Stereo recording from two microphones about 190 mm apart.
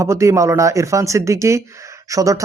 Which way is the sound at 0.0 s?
15° right (ahead or behind).